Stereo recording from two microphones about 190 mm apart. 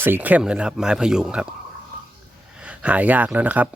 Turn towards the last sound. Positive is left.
turn(degrees=-10)  # may be behind; listen again after turning